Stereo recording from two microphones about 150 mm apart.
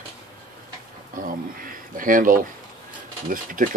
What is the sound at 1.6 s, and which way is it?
Speech, 65° right (ahead or behind).